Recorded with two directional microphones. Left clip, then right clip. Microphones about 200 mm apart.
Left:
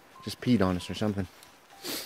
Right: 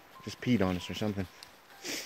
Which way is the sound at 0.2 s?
20° left (ahead or behind).